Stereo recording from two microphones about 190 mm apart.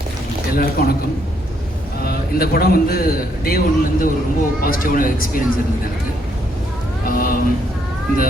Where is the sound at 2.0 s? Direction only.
55° left (ahead or behind).